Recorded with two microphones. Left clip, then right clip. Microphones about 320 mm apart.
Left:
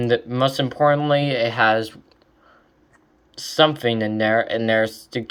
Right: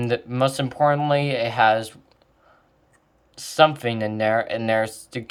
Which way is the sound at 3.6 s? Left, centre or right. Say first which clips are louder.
Even; right.